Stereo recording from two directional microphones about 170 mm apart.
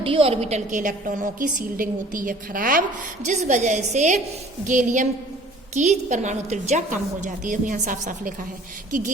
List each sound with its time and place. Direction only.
0.0 s a woman's voice: 35° right (ahead or behind); by 2.8 s 55° right (ahead or behind)
3.2 s a woman's voice: 45° right (ahead or behind)